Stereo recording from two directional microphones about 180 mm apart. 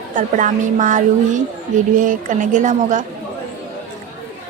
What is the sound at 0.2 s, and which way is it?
Speech, 45° right (ahead or behind).